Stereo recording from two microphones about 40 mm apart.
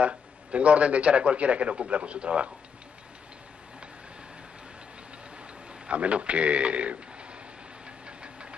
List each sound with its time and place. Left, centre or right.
0.0 s a man's voice: right
5.9 s a man's voice: right
8.2 s engine knocking: right